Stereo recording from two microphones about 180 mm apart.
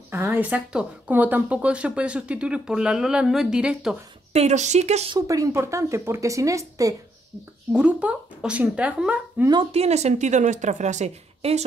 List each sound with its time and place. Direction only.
0.1 s speech: 10° right (ahead or behind)
4.3 s a woman's voice: 40° right (ahead or behind)
5.1 s speech: 20° right (ahead or behind)
7.7 s speech: 5° right (ahead or behind)
9.5 s a woman's voice: 30° right (ahead or behind)